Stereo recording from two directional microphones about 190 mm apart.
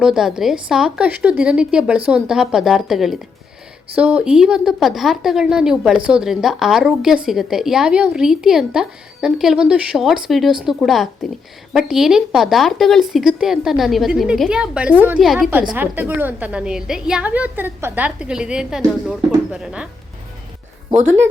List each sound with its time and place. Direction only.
0.0 s a woman's voice: 5° right (ahead or behind)
20.9 s speech: 40° right (ahead or behind)